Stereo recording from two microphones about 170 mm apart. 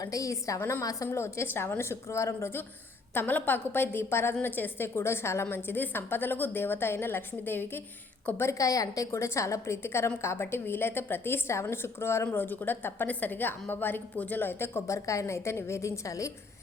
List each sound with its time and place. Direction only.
0.0 s a woman's voice: 20° left (ahead or behind)